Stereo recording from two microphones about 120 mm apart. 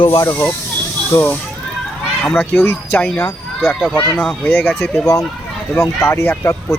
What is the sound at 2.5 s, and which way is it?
Speech, 20° left (ahead or behind).